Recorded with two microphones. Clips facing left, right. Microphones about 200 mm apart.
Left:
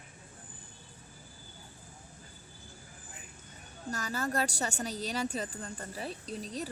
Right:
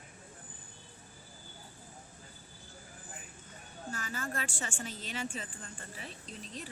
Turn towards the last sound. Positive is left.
turn(degrees=40)  # may be behind; listen again after turning